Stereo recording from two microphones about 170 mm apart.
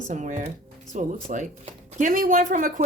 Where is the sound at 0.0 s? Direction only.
45° right (ahead or behind).